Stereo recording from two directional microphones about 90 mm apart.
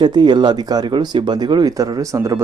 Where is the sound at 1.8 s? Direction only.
40° right (ahead or behind).